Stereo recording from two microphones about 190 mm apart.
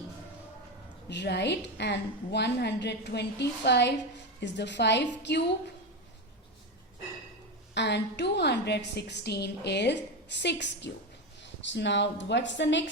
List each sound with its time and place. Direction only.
1.0 s a woman's voice: 65° left (ahead or behind)
7.7 s a woman's voice: 65° left (ahead or behind)